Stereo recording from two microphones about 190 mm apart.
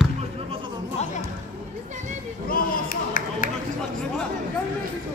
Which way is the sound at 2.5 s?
50° left (ahead or behind).